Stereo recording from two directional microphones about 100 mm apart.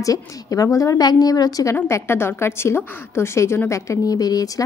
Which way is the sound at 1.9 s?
25° left (ahead or behind).